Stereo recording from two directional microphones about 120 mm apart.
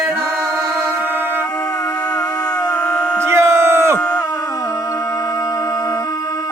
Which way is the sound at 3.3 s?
20° right (ahead or behind).